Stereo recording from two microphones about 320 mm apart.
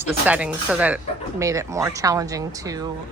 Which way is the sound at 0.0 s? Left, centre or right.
Centre.